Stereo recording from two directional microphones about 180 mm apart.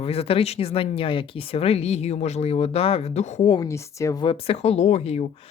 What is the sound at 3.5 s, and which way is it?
Speech, 20° left (ahead or behind).